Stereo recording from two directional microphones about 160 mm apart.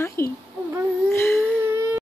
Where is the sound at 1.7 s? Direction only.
15° right (ahead or behind).